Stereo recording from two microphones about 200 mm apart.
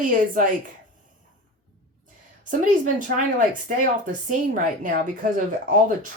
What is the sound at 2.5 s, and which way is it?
Speech, 40° right (ahead or behind).